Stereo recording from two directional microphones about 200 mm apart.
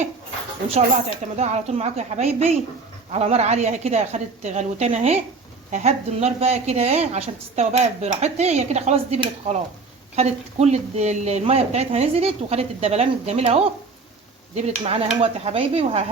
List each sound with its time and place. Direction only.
1.4 s a woman's voice: 35° right (ahead or behind)